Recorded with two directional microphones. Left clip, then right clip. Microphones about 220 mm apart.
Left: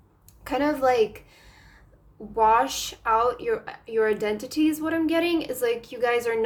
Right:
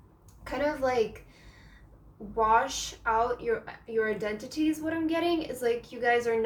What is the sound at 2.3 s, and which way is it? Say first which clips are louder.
A woman's voice: left 5 dB; 45° left (ahead or behind).